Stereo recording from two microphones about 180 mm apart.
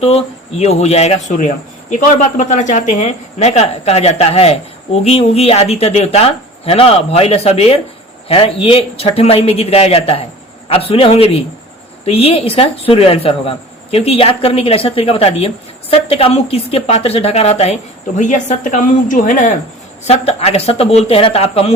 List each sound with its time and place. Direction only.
0.0 s speech: 35° left (ahead or behind)